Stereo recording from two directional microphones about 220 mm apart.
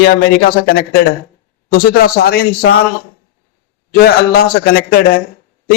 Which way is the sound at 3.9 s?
45° left (ahead or behind).